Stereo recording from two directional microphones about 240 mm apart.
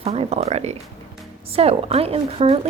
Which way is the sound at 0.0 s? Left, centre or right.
Right.